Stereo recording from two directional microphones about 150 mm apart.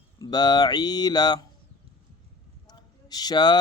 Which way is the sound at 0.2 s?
25° left (ahead or behind).